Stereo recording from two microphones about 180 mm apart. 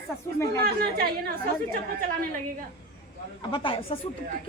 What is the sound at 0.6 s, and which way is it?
Speech, 55° right (ahead or behind).